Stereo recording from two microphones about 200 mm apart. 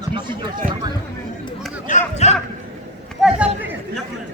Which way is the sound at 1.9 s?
35° left (ahead or behind).